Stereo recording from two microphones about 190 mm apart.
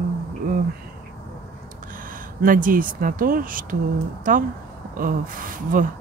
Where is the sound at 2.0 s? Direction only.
45° right (ahead or behind).